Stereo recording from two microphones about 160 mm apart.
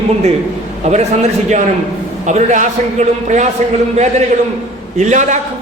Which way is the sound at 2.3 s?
45° right (ahead or behind).